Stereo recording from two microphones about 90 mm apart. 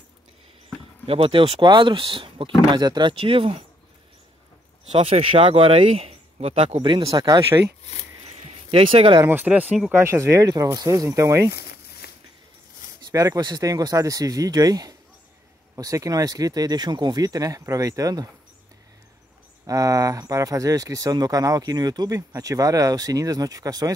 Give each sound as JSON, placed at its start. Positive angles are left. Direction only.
{"t": 1.0, "sound": "speech", "side_deg": -90}
{"t": 2.8, "sound": "speech", "side_deg": -55}
{"t": 4.9, "sound": "speech", "side_deg": -90}
{"t": 7.5, "sound": "speech", "side_deg": -30}
{"t": 8.6, "sound": "speech", "side_deg": -85}
{"t": 9.3, "sound": "speech", "side_deg": -20}
{"t": 9.9, "sound": "speech", "side_deg": -30}
{"t": 13.4, "sound": "speech", "side_deg": -45}
{"t": 19.6, "sound": "speech", "side_deg": -40}